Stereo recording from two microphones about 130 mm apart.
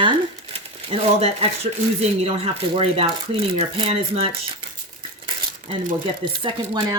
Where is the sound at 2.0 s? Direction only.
50° right (ahead or behind).